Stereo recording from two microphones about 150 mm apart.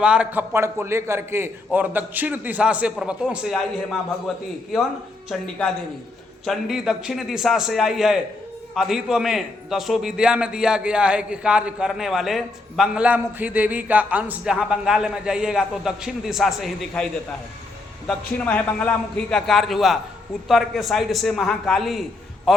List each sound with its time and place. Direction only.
0.0 s a man's voice: 5° right (ahead or behind)
5.3 s a man's voice: 5° left (ahead or behind)
18.1 s a man's voice: 5° left (ahead or behind)